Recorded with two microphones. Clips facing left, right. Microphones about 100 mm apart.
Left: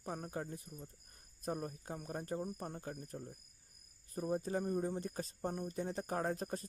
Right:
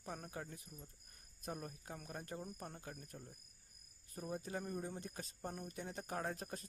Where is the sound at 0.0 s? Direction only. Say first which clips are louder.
Left 5 dB; 35° left (ahead or behind).